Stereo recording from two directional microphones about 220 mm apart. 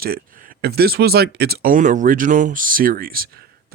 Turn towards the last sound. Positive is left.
turn(degrees=-40)  # may be behind; listen again after turning